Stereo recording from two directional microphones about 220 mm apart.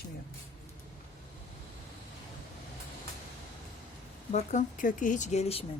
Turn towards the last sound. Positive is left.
turn(degrees=30)  # may be behind; listen again after turning